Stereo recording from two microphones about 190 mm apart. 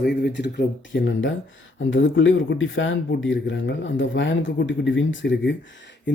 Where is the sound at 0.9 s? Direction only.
75° left (ahead or behind).